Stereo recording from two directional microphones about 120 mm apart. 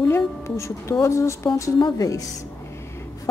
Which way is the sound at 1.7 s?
35° left (ahead or behind).